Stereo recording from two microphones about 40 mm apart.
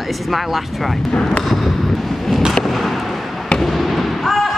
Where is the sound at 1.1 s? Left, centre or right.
Left.